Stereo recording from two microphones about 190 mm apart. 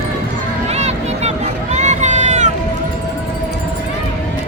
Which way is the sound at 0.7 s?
35° right (ahead or behind).